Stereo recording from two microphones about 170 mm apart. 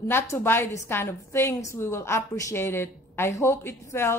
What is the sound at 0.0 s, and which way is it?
A woman's voice, 15° left (ahead or behind).